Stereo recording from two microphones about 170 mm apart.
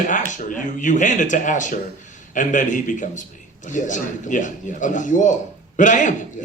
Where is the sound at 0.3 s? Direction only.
50° left (ahead or behind).